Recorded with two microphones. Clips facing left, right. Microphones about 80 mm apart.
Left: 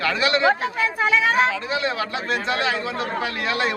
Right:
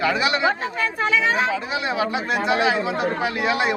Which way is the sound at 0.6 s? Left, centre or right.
Centre.